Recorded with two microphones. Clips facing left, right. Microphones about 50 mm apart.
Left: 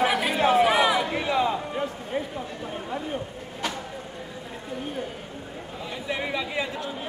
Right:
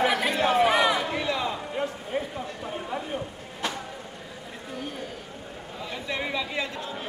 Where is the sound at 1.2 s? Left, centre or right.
Centre.